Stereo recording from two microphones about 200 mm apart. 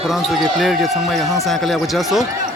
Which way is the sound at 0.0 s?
Centre (ahead or behind).